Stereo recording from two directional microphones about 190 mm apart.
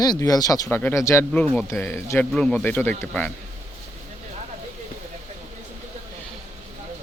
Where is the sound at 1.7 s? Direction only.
15° left (ahead or behind).